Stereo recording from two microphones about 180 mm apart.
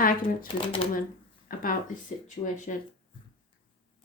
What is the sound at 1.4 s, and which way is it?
Speech, 50° left (ahead or behind).